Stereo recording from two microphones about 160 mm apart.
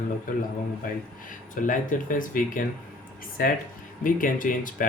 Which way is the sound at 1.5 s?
55° left (ahead or behind).